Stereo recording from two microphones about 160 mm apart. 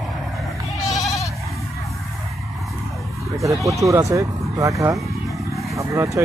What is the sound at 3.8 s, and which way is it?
Speech, 20° right (ahead or behind).